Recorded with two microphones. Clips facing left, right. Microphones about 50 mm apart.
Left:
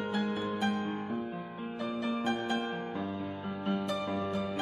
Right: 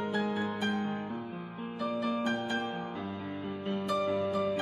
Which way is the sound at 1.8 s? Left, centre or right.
Centre.